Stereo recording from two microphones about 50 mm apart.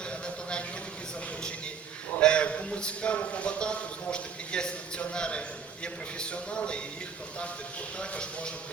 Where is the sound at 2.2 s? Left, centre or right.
Left.